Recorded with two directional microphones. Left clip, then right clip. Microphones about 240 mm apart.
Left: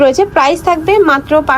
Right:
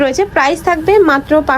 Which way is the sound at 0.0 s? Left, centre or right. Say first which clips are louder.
Left 3 dB; centre.